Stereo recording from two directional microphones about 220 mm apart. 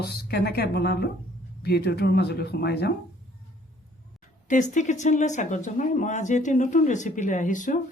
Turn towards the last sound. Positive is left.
turn(degrees=35)  # may be behind; listen again after turning